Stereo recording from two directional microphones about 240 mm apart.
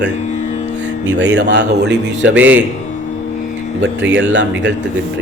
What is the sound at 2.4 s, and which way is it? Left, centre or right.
Speech, centre.